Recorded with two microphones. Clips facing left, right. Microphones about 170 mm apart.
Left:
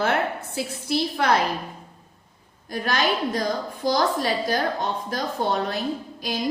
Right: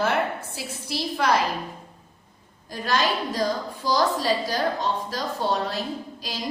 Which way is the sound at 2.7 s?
55° left (ahead or behind).